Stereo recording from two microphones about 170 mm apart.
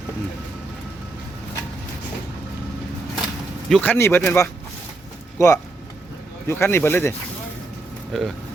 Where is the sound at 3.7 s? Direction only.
10° left (ahead or behind).